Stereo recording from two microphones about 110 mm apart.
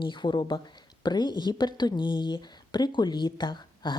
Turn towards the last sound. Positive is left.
turn(degrees=40)  # may be behind; listen again after turning